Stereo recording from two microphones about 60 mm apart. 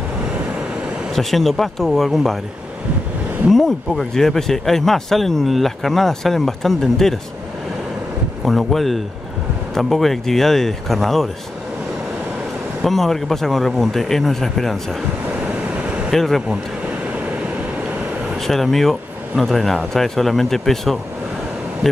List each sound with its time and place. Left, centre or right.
1.1 s speech: centre
3.4 s speech: centre
8.5 s speech: centre
12.8 s speech: centre
15.4 s vehicle: centre
16.1 s speech: centre
18.4 s speech: centre